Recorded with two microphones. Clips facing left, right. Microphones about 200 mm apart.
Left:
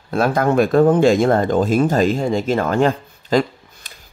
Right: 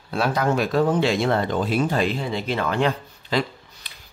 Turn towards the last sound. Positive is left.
turn(degrees=45)  # may be behind; listen again after turning